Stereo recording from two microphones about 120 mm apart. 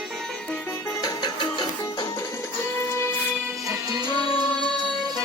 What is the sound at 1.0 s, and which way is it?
Music, 40° left (ahead or behind).